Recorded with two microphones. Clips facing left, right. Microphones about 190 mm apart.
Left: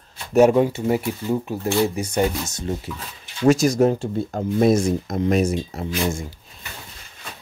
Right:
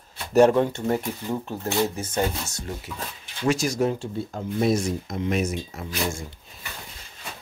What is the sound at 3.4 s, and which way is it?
Speech, 45° left (ahead or behind).